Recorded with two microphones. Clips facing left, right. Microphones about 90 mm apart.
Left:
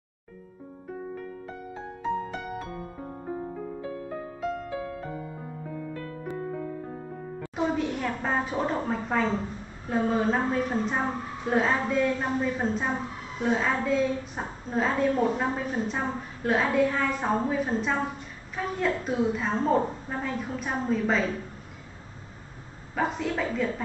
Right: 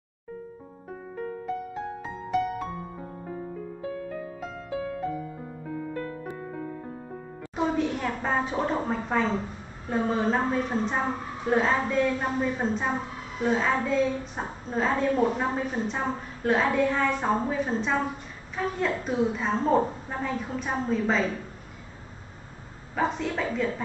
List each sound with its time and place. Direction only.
7.5 s a woman's voice: centre (ahead or behind)
22.9 s a woman's voice: centre (ahead or behind)